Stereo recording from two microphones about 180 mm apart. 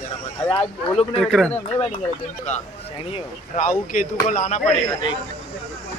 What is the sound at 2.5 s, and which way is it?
Speech, 35° left (ahead or behind).